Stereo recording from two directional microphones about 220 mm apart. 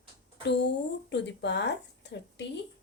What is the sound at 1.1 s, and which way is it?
Speech, 50° left (ahead or behind).